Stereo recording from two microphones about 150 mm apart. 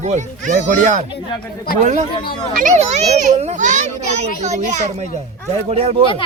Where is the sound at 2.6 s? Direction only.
50° right (ahead or behind).